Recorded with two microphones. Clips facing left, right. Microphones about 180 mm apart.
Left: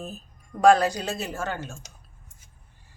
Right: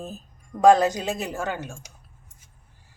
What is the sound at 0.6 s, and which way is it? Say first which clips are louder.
Speech: right 2 dB; 20° right (ahead or behind).